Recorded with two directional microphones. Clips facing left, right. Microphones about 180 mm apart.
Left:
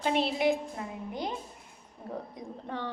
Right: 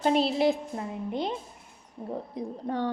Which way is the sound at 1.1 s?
25° right (ahead or behind).